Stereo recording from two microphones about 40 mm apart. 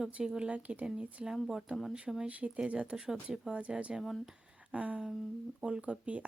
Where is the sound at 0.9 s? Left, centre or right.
Centre.